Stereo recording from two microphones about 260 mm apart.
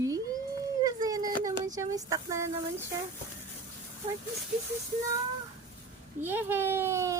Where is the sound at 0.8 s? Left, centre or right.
Centre.